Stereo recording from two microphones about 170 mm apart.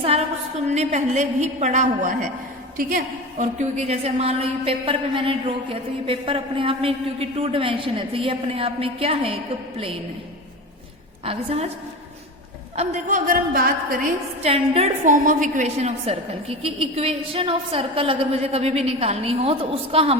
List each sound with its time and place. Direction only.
0.0 s a sound: 35° right (ahead or behind)
0.7 s a woman's voice: 40° right (ahead or behind)
11.3 s a woman's voice: 35° right (ahead or behind)
12.7 s a woman's voice: 40° right (ahead or behind); by 14.1 s 60° right (ahead or behind)
14.4 s a woman's voice: 35° right (ahead or behind)
15.0 s a woman's voice: 50° right (ahead or behind); by 20.1 s 35° right (ahead or behind)